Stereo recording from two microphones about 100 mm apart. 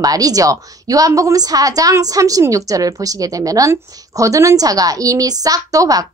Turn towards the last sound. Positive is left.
turn(degrees=-35)  # may be behind; listen again after turning